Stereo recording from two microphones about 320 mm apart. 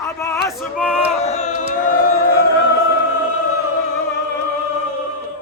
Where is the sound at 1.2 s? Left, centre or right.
Left.